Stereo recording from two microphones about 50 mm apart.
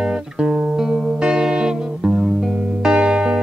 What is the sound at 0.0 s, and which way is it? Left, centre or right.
Music, centre.